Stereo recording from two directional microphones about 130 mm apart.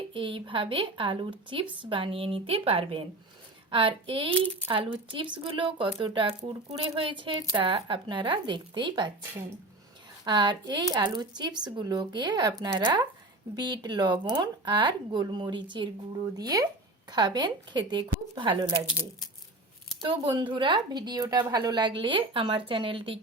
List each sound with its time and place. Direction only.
0.1 s a woman's voice: 40° right (ahead or behind)
10.2 s speech: 35° right (ahead or behind)
20.0 s speech: 40° right (ahead or behind)